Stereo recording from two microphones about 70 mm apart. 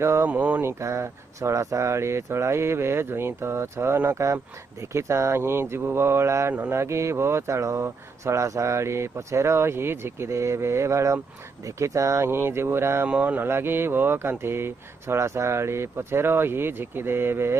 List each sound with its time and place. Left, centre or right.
0.0 s speech: right
0.3 s speech: right
0.6 s speech: right
13.0 s speech: right
13.5 s speech: right